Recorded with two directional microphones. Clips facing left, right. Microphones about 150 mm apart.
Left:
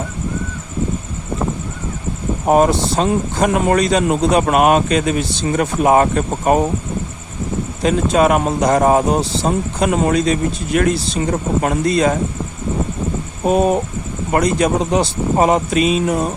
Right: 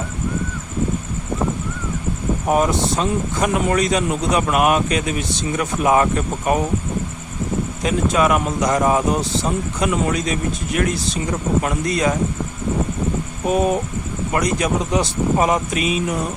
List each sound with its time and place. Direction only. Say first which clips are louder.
2.5 s speech: left 5 dB; 30° left (ahead or behind)
7.8 s speech: left 4 dB; 30° left (ahead or behind)
13.4 s speech: left 4 dB; 30° left (ahead or behind)